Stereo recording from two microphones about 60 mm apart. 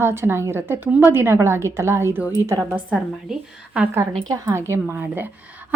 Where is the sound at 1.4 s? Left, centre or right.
Right.